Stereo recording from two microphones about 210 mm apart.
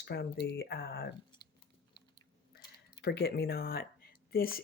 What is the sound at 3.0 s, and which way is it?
Speech, 50° left (ahead or behind).